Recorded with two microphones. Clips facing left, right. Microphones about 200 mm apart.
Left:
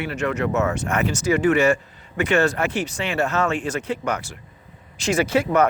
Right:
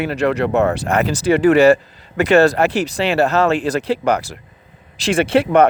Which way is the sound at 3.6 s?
35° right (ahead or behind).